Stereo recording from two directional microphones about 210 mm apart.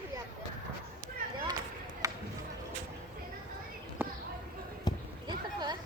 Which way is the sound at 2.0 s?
15° right (ahead or behind).